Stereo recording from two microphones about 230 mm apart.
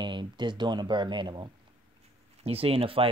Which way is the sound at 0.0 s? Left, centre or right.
Centre.